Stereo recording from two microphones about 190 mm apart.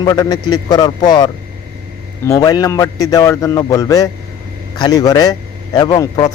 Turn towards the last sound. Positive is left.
turn(degrees=20)  # may be behind; listen again after turning